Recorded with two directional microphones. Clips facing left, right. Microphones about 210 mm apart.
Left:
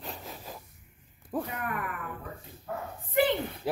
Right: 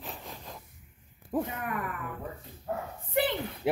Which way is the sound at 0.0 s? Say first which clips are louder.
Left 1 dB; centre (ahead or behind).